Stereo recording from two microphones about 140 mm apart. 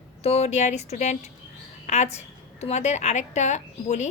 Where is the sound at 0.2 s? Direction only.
45° left (ahead or behind).